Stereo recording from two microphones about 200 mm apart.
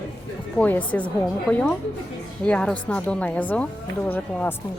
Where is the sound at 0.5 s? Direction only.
5° left (ahead or behind).